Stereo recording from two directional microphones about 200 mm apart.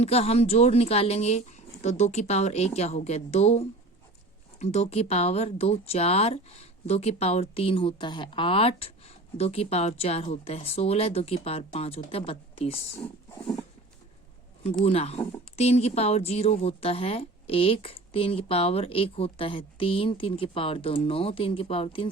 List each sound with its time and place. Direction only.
0.0 s speech: 30° left (ahead or behind)
13.0 s a sound: 20° left (ahead or behind)
14.8 s speech: 30° left (ahead or behind)